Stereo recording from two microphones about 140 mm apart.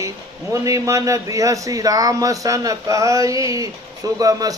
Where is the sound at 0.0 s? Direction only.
25° right (ahead or behind).